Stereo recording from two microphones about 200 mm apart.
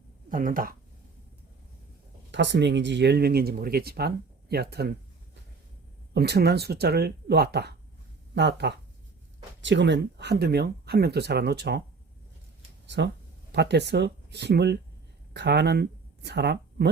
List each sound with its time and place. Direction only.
0.3 s speech: 45° right (ahead or behind)
2.3 s speech: 60° right (ahead or behind)
6.1 s speech: 55° right (ahead or behind)
13.5 s speech: 55° right (ahead or behind)